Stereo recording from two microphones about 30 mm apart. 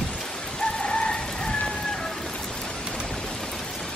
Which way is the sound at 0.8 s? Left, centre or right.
Left.